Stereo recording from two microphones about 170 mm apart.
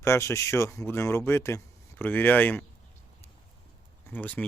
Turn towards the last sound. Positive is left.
turn(degrees=10)  # may be behind; listen again after turning